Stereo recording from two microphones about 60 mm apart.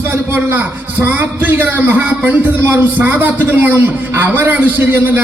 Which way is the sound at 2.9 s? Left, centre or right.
Right.